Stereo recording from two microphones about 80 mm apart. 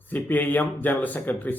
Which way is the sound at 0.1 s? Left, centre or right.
Left.